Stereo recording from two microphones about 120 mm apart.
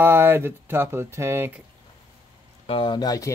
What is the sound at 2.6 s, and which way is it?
Speech, 45° left (ahead or behind).